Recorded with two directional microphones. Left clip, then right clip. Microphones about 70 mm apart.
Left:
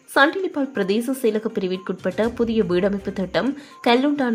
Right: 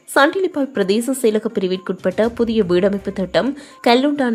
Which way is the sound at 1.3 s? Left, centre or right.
Right.